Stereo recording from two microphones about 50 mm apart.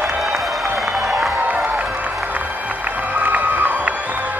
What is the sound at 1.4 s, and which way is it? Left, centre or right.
Music, right.